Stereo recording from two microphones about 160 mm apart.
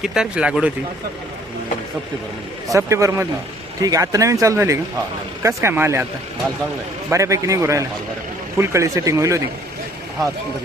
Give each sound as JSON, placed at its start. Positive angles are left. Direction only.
{"t": 0.0, "sound": "speech", "side_deg": -5}
{"t": 2.6, "sound": "speech", "side_deg": -20}
{"t": 7.1, "sound": "speech", "side_deg": -20}